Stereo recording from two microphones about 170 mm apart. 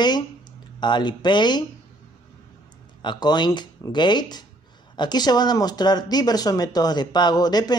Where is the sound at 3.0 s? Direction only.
25° left (ahead or behind).